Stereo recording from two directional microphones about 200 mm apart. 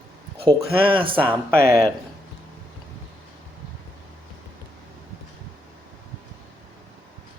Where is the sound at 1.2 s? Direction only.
10° left (ahead or behind).